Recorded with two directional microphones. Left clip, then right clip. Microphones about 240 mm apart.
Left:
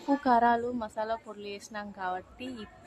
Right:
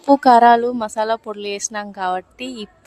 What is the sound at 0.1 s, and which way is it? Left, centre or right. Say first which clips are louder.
A woman's voice: right 14 dB; right.